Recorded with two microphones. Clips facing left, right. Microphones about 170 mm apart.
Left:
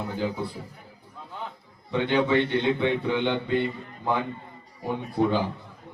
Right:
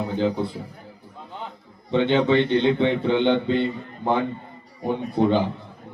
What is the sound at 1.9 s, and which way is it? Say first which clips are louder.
A man's voice: right 4 dB; 25° right (ahead or behind).